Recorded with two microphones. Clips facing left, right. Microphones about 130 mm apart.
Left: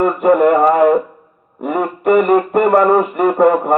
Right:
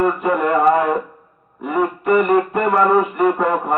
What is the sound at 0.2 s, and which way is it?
Music, 55° left (ahead or behind).